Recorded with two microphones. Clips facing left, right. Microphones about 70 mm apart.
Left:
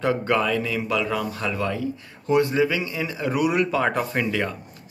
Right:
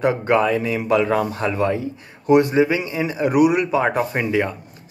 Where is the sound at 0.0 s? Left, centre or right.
Right.